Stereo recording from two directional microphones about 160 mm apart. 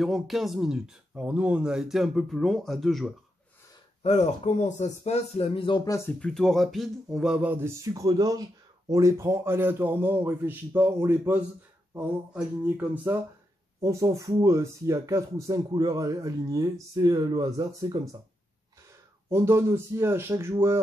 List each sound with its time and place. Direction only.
0.0 s speech: centre (ahead or behind)
4.0 s speech: 45° left (ahead or behind)
5.9 s speech: 15° left (ahead or behind)
6.1 s a man's voice: 5° left (ahead or behind); by 18.1 s 25° right (ahead or behind)
19.2 s a man's voice: 15° right (ahead or behind)